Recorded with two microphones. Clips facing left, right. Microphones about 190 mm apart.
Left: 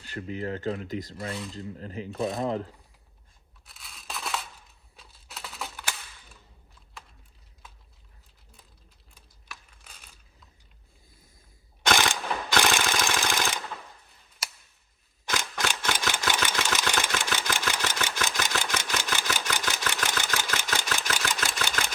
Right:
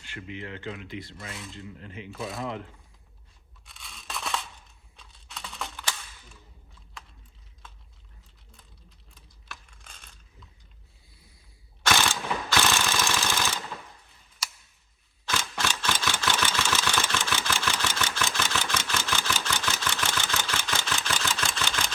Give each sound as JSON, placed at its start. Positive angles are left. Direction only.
{"t": 0.0, "sound": "speech", "side_deg": 40}
{"t": 3.7, "sound": "scissors", "side_deg": 0}
{"t": 4.9, "sound": "computer keyboard", "side_deg": 5}
{"t": 9.5, "sound": "computer keyboard", "side_deg": 5}
{"t": 11.9, "sound": "mechanisms", "side_deg": 15}
{"t": 15.3, "sound": "vehicle", "side_deg": 15}